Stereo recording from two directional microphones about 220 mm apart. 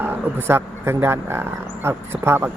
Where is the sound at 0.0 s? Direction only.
10° right (ahead or behind).